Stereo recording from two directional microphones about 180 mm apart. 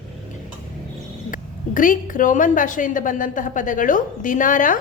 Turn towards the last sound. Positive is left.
turn(degrees=50)  # may be behind; listen again after turning